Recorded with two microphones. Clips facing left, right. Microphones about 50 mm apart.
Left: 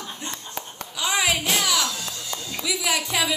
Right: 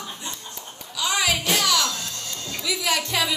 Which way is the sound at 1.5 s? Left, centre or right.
Centre.